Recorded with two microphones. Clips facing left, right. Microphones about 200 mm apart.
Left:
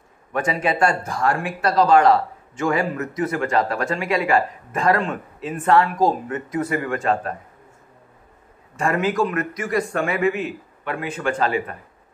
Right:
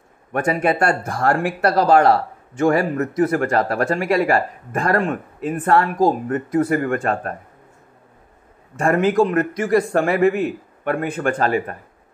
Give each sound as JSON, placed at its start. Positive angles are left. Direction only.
{"t": 0.3, "sound": "speech", "side_deg": -55}
{"t": 8.7, "sound": "speech", "side_deg": -50}
{"t": 9.4, "sound": "speech", "side_deg": -30}
{"t": 9.8, "sound": "speech", "side_deg": -55}